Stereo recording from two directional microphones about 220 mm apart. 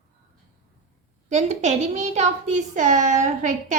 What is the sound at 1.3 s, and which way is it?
A woman's voice, 30° right (ahead or behind).